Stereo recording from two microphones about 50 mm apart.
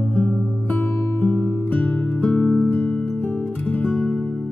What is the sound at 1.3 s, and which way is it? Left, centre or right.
Music, left.